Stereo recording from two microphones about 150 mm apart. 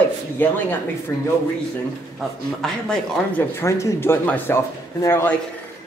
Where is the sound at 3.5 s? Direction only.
15° left (ahead or behind).